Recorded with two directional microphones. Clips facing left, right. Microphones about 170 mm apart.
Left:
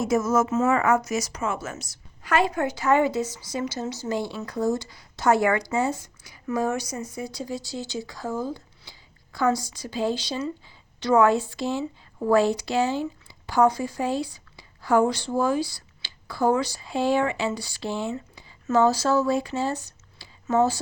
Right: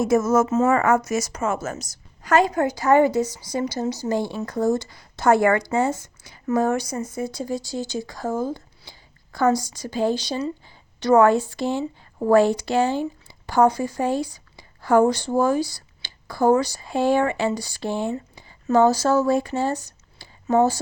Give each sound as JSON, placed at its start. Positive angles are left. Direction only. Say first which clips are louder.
{"t": 0.0, "sound": "speech", "louder": "right 4 dB", "side_deg": -50}
{"t": 0.4, "sound": "speech", "louder": "right 3 dB", "side_deg": -35}
{"t": 4.2, "sound": "speech", "louder": "right 4 dB", "side_deg": -20}
{"t": 4.4, "sound": "speech", "louder": "right 3 dB", "side_deg": -50}